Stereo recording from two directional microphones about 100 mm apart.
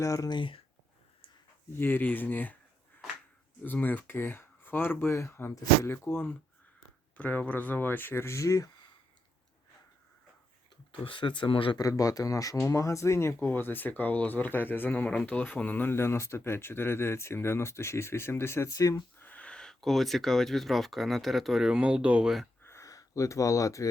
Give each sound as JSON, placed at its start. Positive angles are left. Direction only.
{"t": 0.0, "sound": "speech", "side_deg": 35}
{"t": 0.3, "sound": "speech", "side_deg": 55}
{"t": 1.8, "sound": "speech", "side_deg": 20}
{"t": 3.6, "sound": "speech", "side_deg": 15}
{"t": 11.0, "sound": "speech", "side_deg": 55}
{"t": 11.8, "sound": "speech", "side_deg": 35}
{"t": 19.2, "sound": "speech", "side_deg": 15}
{"t": 22.6, "sound": "a sound", "side_deg": 30}